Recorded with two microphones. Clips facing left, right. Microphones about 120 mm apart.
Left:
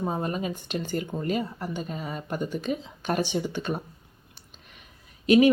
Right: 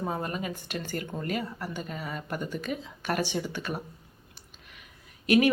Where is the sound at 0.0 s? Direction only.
20° left (ahead or behind).